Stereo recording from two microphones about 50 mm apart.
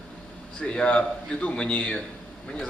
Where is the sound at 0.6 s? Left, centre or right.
Left.